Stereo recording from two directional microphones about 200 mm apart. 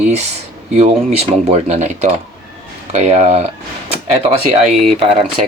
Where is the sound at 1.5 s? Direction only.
35° right (ahead or behind).